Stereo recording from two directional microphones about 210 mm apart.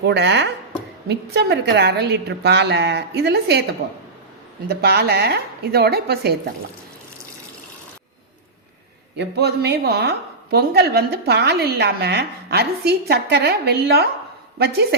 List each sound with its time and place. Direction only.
0.1 s chopping: 55° right (ahead or behind)
1.0 s a woman's voice: 50° right (ahead or behind)
4.7 s a woman's voice: 50° right (ahead or behind)
9.1 s a woman's voice: 50° right (ahead or behind)